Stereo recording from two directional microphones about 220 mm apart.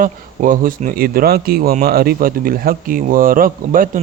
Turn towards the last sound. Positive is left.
turn(degrees=-40)  # may be behind; listen again after turning